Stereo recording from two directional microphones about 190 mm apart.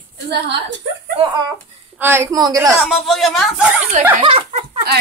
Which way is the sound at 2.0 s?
10° right (ahead or behind).